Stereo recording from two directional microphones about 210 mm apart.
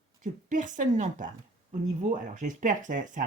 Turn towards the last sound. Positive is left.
turn(degrees=-40)  # may be behind; listen again after turning